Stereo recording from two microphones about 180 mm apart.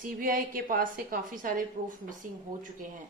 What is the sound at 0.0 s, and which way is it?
A woman's voice, 50° right (ahead or behind).